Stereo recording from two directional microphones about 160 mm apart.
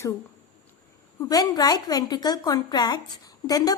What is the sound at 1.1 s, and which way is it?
A woman's voice, 25° left (ahead or behind).